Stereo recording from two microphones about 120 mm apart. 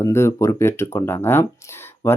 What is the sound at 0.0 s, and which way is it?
Speech, 25° left (ahead or behind).